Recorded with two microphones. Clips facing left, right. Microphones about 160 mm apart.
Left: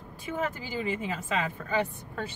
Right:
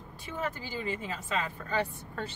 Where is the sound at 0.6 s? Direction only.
15° left (ahead or behind).